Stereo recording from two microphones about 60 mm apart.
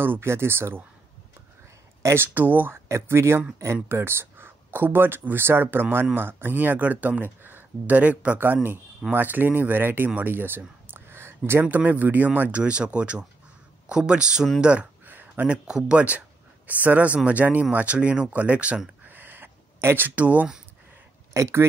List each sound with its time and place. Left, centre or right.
0.0 s speech: right
2.1 s speech: right
2.9 s speech: right
10.9 s a sound: right
11.7 s speech: right
15.0 s a sound: right
15.4 s speech: centre
19.0 s a sound: right
20.2 s speech: right
21.3 s speech: right